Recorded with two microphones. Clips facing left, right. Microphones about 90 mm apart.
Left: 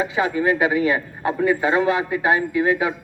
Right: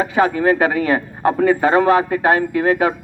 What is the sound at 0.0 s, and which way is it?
A man's voice, 45° right (ahead or behind).